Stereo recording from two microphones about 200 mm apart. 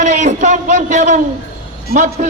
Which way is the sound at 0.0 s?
35° right (ahead or behind).